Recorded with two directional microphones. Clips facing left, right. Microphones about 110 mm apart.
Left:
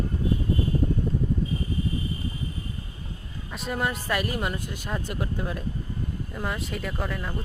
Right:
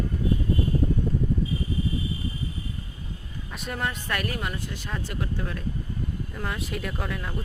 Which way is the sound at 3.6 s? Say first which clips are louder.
Left 3 dB; 5° left (ahead or behind).